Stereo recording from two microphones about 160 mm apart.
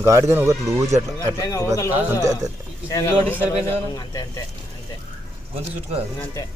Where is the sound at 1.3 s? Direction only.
20° left (ahead or behind).